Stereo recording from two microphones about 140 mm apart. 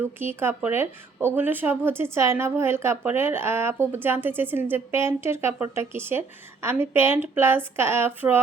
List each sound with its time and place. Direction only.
0.0 s a woman's voice: 15° right (ahead or behind)